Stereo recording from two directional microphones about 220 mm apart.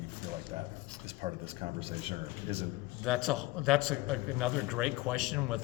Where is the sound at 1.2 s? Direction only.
25° right (ahead or behind).